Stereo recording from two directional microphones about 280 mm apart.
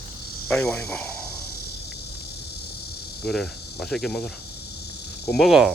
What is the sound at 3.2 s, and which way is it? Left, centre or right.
Cricket, centre.